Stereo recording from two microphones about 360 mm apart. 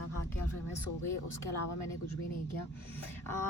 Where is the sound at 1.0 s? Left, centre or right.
Left.